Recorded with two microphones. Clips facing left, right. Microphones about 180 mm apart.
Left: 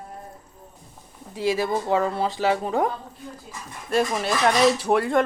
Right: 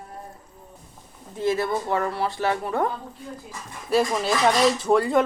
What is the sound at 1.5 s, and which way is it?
Speech, 15° left (ahead or behind).